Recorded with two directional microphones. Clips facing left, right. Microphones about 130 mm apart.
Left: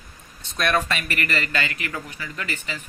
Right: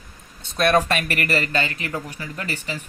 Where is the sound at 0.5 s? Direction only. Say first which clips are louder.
Right 5 dB; 40° right (ahead or behind).